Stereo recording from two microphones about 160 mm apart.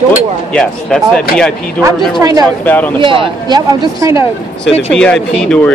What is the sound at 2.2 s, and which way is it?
Speech, 20° right (ahead or behind).